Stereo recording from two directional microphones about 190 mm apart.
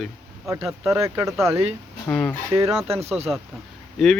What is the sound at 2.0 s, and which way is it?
Speech, 5° left (ahead or behind).